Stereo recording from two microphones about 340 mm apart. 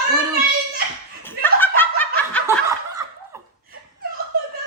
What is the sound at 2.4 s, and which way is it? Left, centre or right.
Snicker, centre.